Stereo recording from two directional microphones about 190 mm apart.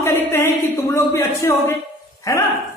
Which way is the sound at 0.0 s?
15° left (ahead or behind).